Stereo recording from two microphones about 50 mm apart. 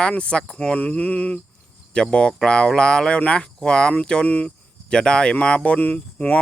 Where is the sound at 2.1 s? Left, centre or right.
Centre.